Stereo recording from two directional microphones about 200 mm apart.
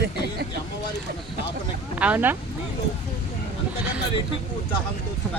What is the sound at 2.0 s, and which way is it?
Speech, 10° right (ahead or behind).